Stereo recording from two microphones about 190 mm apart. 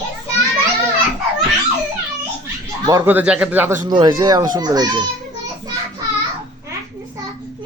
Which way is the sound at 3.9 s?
25° right (ahead or behind).